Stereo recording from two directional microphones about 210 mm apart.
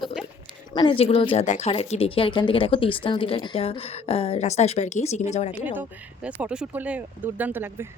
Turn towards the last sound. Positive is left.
turn(degrees=-10)  # may be behind; listen again after turning